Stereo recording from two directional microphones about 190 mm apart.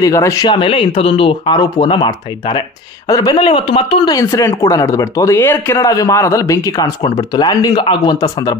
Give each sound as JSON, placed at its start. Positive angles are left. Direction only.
{"t": 0.0, "sound": "speech", "side_deg": 15}